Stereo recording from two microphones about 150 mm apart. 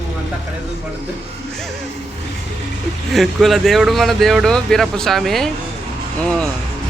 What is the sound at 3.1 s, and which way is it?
Speech, centre (ahead or behind).